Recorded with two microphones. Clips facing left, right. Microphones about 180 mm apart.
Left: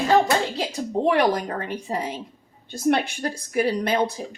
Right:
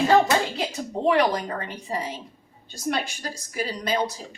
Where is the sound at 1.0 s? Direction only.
50° left (ahead or behind).